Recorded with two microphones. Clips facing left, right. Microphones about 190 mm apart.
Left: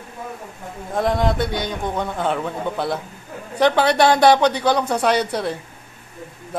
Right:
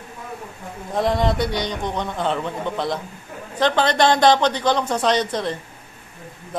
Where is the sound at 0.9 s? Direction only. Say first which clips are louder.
Even; centre (ahead or behind).